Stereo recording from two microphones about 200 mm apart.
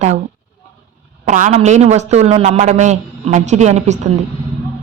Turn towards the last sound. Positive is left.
turn(degrees=-35)  # may be behind; listen again after turning